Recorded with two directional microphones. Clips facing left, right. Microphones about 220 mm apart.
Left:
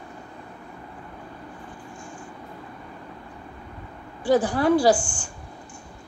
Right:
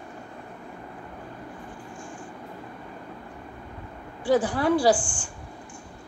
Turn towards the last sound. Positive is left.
turn(degrees=40)  # may be behind; listen again after turning